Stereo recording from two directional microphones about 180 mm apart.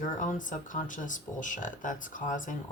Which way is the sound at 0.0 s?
45° left (ahead or behind).